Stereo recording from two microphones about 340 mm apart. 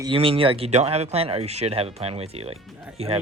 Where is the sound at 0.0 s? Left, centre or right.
Centre.